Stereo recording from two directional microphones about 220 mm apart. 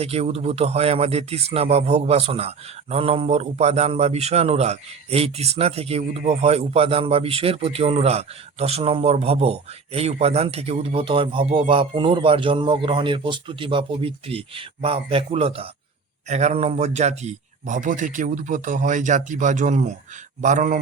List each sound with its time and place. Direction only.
0.0 s a man's voice: 30° right (ahead or behind)